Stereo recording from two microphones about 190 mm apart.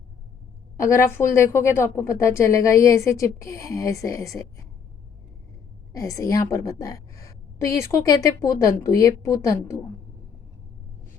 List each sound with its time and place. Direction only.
0.8 s a woman's voice: 15° left (ahead or behind)
5.9 s a woman's voice: 15° left (ahead or behind)